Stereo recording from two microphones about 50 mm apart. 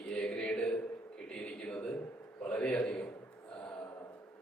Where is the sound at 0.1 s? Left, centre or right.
Centre.